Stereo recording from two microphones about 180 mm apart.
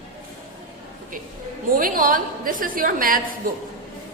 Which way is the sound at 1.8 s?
50° right (ahead or behind).